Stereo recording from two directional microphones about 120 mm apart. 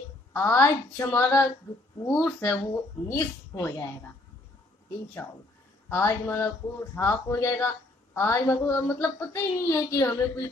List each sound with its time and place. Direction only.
0.3 s a woman's voice: 20° left (ahead or behind)
3.1 s a woman's voice: 25° left (ahead or behind)
5.2 s a woman's voice: 10° left (ahead or behind)